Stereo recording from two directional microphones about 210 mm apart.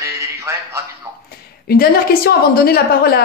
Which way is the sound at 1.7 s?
45° left (ahead or behind).